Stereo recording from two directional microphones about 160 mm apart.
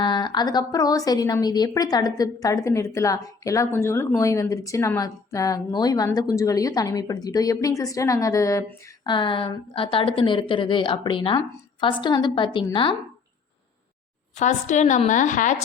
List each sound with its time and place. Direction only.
0.0 s a woman's voice: 30° left (ahead or behind)
9.1 s a woman's voice: 30° left (ahead or behind)
14.3 s a woman's voice: 50° left (ahead or behind)